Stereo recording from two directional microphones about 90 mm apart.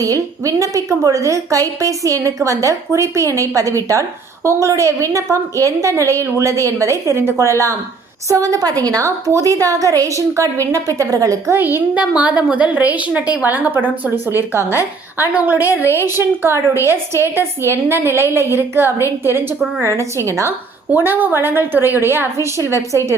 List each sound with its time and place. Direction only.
0.0 s a woman's voice: 40° right (ahead or behind)
11.9 s a woman's voice: 15° right (ahead or behind)
15.8 s a woman's voice: 25° left (ahead or behind)
16.0 s a woman's voice: 25° right (ahead or behind)
20.9 s a woman's voice: 20° right (ahead or behind)